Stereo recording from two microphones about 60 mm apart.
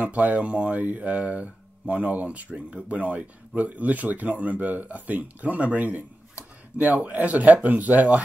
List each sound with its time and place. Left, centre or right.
0.0 s speech: right